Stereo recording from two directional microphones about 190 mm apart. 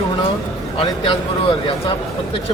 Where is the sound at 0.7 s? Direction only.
25° left (ahead or behind).